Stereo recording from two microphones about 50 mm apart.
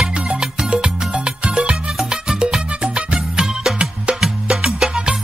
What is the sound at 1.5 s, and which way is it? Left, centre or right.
Music, right.